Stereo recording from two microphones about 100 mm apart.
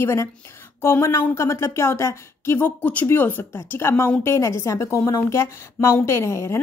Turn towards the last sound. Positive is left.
turn(degrees=30)  # may be behind; listen again after turning